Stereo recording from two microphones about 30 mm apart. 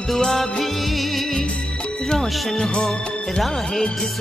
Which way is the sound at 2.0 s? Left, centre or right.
Centre.